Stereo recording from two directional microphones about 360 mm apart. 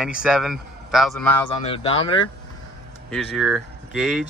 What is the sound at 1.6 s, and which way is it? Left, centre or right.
Speech, centre.